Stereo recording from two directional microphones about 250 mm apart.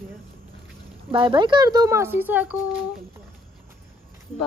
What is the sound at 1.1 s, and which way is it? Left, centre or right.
Speech, centre.